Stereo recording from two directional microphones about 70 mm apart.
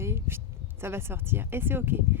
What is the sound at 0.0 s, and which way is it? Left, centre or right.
Speech, right.